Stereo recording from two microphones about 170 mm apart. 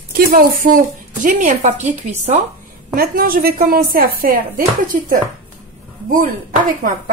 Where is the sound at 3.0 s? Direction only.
60° right (ahead or behind).